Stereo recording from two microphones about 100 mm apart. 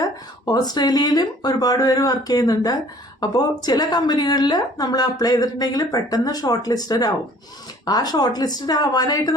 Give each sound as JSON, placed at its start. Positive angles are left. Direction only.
{"t": 0.0, "sound": "a woman's voice", "side_deg": 40}